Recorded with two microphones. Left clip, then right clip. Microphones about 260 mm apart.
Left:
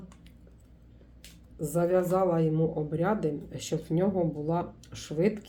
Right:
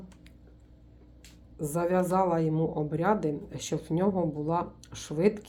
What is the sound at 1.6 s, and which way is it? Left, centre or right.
A woman's voice, centre.